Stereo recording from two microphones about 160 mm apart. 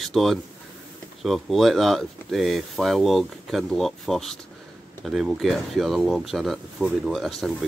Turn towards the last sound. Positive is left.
turn(degrees=0)  # may be behind; listen again after turning